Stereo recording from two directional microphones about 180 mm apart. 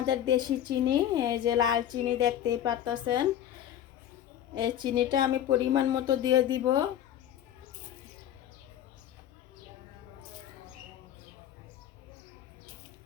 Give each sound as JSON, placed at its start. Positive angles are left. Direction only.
{"t": 0.0, "sound": "a woman's voice", "side_deg": -25}
{"t": 4.5, "sound": "a woman's voice", "side_deg": -25}